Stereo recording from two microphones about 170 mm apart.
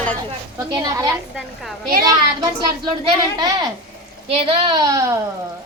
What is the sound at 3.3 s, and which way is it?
A woman's voice, 25° right (ahead or behind).